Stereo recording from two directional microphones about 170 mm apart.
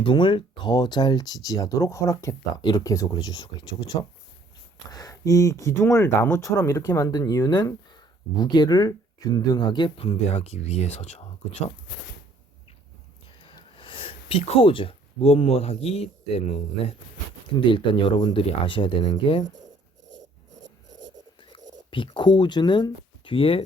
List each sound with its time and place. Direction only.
0.0 s speech: 30° left (ahead or behind)
13.4 s speech: 30° left (ahead or behind)
21.8 s speech: 30° left (ahead or behind)